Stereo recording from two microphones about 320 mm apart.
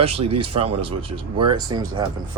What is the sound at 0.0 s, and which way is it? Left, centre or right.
Speech, centre.